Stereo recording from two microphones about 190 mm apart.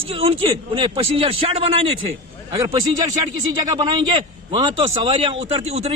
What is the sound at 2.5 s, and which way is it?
Speech, 20° right (ahead or behind).